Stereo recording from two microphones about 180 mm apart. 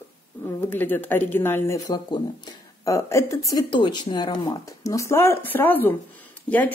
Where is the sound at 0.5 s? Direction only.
10° left (ahead or behind).